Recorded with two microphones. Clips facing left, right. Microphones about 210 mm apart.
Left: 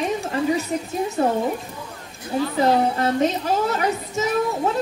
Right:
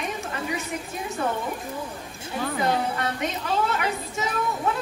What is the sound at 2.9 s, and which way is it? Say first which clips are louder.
Speech: left 8 dB; 30° left (ahead or behind).